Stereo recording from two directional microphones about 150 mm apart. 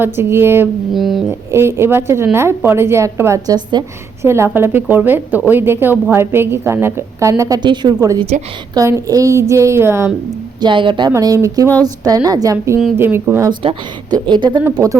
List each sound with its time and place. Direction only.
0.0 s a woman's voice: 15° right (ahead or behind)
0.9 s speech: centre (ahead or behind)
1.3 s a woman's voice: 15° right (ahead or behind)
4.3 s a woman's voice: 15° right (ahead or behind)
10.6 s a woman's voice: 35° right (ahead or behind)
11.1 s a woman's voice: 20° right (ahead or behind)
13.6 s a woman's voice: 35° right (ahead or behind)